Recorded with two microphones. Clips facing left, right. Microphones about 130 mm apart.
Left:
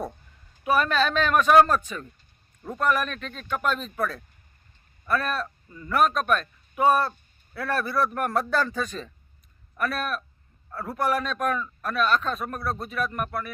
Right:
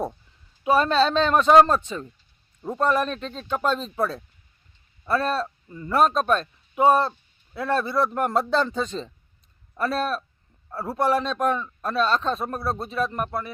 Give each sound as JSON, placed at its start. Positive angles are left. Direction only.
{"t": 0.6, "sound": "speech", "side_deg": -25}